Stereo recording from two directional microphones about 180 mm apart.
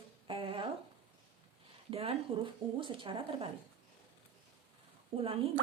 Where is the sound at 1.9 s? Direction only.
35° right (ahead or behind).